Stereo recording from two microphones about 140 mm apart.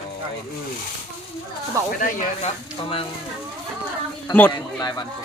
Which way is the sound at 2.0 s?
60° left (ahead or behind).